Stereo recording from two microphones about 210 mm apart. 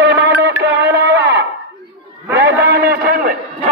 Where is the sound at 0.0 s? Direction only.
50° right (ahead or behind).